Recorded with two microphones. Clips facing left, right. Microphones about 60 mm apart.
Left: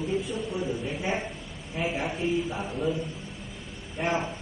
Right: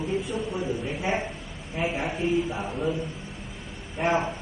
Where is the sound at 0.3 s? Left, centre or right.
Centre.